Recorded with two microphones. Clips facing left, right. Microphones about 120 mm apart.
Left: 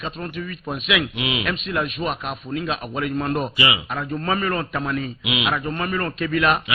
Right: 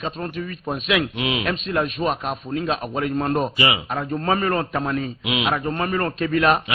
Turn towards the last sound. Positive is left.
turn(degrees=-35)  # may be behind; listen again after turning